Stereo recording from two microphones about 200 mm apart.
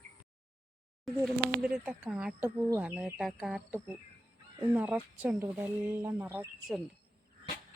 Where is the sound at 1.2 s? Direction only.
5° right (ahead or behind).